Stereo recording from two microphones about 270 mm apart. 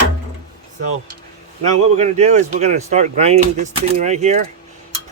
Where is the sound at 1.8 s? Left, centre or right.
Right.